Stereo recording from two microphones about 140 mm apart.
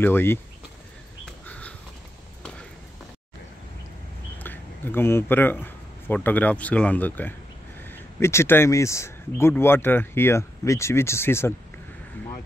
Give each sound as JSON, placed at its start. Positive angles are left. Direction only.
{"t": 0.0, "sound": "speech", "side_deg": 15}
{"t": 4.4, "sound": "speech", "side_deg": 15}